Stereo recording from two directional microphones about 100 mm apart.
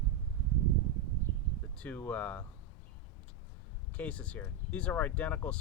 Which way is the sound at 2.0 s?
15° left (ahead or behind).